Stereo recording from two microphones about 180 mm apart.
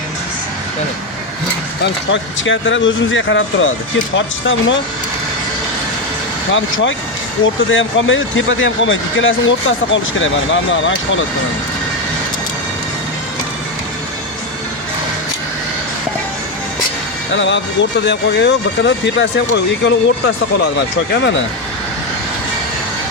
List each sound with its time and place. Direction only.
1.8 s speech: 90° left
6.5 s speech: 90° left
17.3 s speech: 85° left